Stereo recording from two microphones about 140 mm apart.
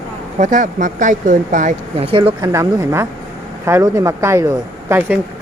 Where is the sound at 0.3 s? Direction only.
60° right (ahead or behind).